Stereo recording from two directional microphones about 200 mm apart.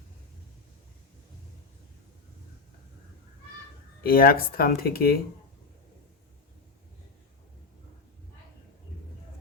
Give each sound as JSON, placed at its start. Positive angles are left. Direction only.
{"t": 4.0, "sound": "speech", "side_deg": 50}